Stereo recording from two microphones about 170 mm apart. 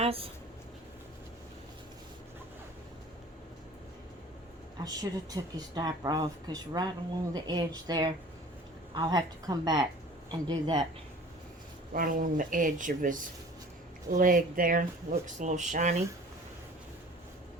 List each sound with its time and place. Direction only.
0.0 s speech: 35° right (ahead or behind)
4.8 s speech: 20° right (ahead or behind)
11.9 s speech: 55° right (ahead or behind)